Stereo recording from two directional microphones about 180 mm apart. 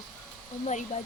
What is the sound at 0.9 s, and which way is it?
Speech, 40° left (ahead or behind).